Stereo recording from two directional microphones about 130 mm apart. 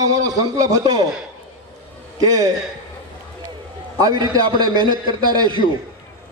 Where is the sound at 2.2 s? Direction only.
30° right (ahead or behind).